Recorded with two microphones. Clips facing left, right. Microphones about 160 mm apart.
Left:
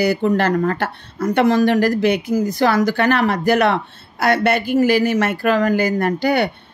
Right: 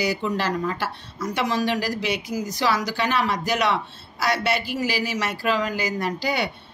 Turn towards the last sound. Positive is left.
turn(degrees=55)  # may be behind; listen again after turning